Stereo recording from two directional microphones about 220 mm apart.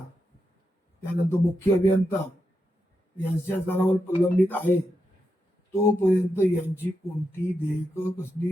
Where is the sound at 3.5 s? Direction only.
10° left (ahead or behind).